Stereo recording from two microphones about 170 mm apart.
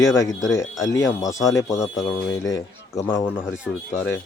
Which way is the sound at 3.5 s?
5° right (ahead or behind).